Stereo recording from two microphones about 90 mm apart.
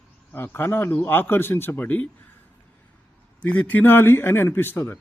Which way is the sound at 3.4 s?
15° left (ahead or behind).